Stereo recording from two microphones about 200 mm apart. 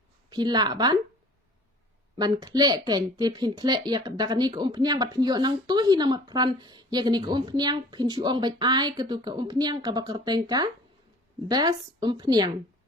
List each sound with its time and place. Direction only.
0.3 s speech: 20° right (ahead or behind)
2.1 s speech: 20° right (ahead or behind)